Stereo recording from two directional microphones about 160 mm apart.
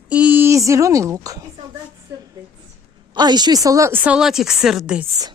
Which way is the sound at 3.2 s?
25° right (ahead or behind).